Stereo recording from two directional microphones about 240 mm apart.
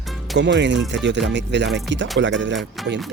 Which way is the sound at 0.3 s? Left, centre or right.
Right.